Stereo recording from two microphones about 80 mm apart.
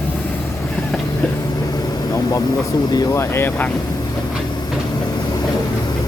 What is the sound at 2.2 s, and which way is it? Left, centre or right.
Vehicle, left.